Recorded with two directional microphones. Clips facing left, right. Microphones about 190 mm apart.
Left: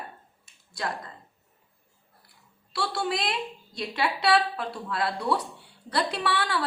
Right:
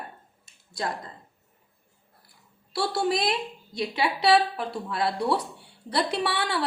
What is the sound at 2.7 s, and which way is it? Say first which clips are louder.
Speech: right 4 dB; 35° right (ahead or behind).